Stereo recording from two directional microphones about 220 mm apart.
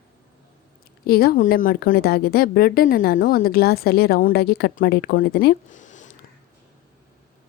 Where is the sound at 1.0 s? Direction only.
45° left (ahead or behind).